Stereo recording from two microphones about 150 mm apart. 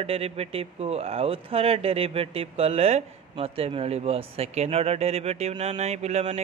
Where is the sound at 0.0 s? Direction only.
40° right (ahead or behind).